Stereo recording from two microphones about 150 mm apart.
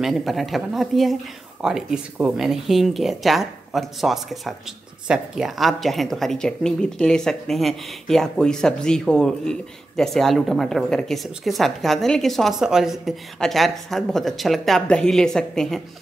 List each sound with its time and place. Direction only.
0.0 s speech: centre (ahead or behind)